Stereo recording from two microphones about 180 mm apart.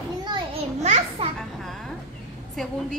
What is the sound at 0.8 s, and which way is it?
Speech, 40° right (ahead or behind).